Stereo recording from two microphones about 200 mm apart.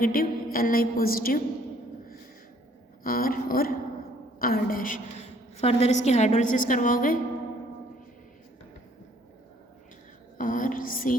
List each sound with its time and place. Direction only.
0.0 s a woman's voice: 45° left (ahead or behind)
3.0 s a woman's voice: 45° left (ahead or behind)
10.3 s a woman's voice: 45° left (ahead or behind)